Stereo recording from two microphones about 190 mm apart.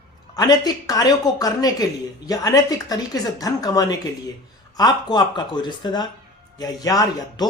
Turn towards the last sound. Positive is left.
turn(degrees=20)  # may be behind; listen again after turning